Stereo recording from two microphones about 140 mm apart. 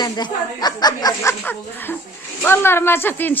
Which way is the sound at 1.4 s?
15° left (ahead or behind).